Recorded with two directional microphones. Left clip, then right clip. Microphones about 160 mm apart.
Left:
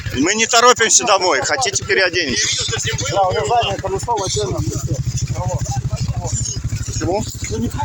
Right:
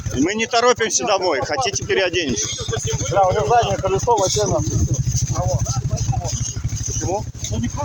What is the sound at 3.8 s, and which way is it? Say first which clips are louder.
Speech: right 3 dB; 20° right (ahead or behind).